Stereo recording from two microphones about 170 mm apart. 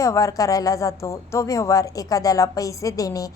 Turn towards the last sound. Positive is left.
turn(degrees=20)  # may be behind; listen again after turning